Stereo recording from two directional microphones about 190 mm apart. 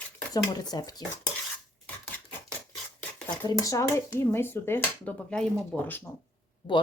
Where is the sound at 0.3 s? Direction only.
20° left (ahead or behind).